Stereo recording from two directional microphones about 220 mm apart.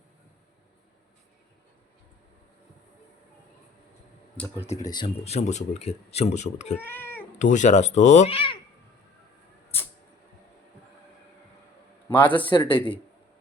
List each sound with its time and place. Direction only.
4.8 s speech: 20° left (ahead or behind)
6.7 s speech: 10° left (ahead or behind)
7.3 s speech: 35° left (ahead or behind)
12.0 s a man's voice: 10° left (ahead or behind)
12.5 s speech: 20° left (ahead or behind)